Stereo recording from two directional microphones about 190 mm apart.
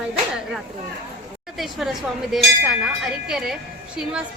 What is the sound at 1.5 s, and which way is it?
A woman's voice, centre (ahead or behind).